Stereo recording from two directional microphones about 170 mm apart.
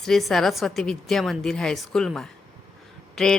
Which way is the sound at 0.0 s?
Centre (ahead or behind).